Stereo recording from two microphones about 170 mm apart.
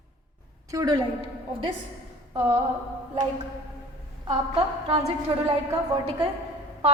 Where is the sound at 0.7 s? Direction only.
20° right (ahead or behind).